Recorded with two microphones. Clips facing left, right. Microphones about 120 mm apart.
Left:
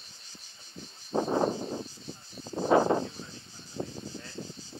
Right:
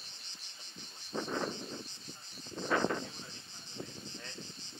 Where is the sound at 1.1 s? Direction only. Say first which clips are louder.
Left 10 dB; 45° left (ahead or behind).